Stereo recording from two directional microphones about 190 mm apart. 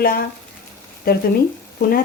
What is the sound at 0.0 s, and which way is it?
Speech, 50° left (ahead or behind).